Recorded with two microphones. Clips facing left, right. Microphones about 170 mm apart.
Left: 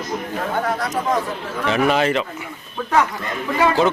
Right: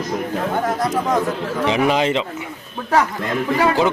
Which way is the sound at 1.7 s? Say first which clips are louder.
Even; 15° right (ahead or behind).